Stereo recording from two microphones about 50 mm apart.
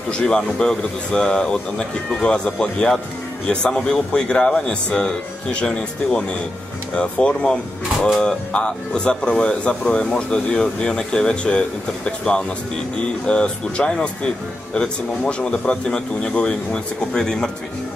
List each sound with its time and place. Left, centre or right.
0.1 s speech: centre
15.2 s speech: left